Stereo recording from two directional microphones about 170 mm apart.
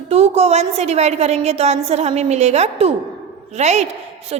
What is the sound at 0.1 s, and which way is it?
A woman's voice, 40° right (ahead or behind).